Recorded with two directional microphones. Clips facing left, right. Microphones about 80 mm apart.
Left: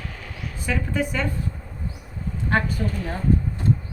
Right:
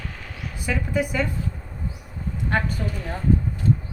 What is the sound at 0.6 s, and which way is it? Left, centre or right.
Speech, centre.